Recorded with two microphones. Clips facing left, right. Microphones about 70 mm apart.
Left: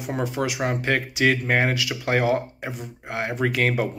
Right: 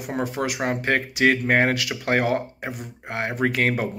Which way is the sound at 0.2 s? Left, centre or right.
Right.